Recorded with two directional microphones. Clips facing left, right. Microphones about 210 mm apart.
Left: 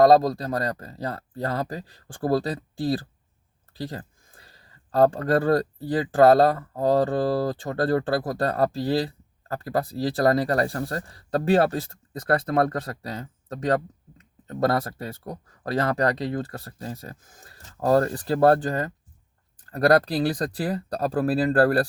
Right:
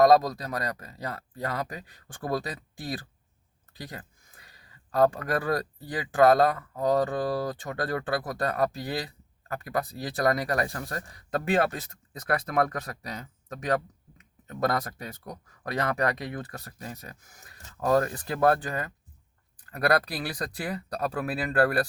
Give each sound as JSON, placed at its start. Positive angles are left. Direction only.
{"t": 0.0, "sound": "speech", "side_deg": 30}